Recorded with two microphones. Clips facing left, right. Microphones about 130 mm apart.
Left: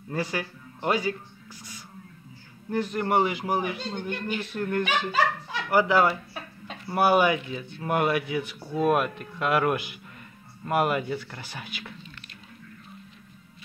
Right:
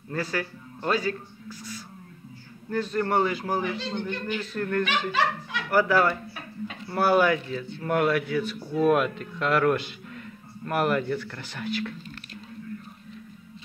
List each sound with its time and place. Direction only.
0.1 s a man's voice: 15° left (ahead or behind)